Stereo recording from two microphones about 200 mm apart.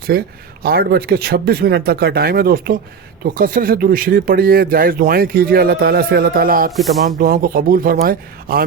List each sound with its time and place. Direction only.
0.1 s speech: 50° right (ahead or behind)